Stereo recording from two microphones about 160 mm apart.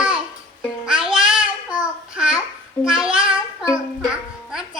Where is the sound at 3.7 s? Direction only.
5° right (ahead or behind).